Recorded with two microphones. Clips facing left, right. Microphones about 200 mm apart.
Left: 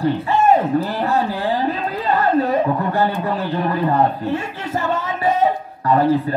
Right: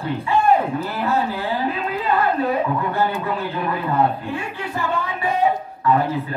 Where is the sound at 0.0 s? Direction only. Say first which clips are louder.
Left 3 dB; 40° left (ahead or behind).